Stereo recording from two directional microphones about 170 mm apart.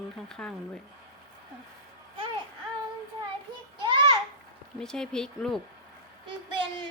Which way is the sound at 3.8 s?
25° right (ahead or behind).